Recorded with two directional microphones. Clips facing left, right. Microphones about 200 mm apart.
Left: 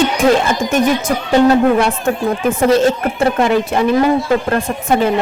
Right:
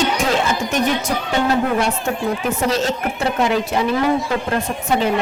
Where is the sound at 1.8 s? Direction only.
50° left (ahead or behind).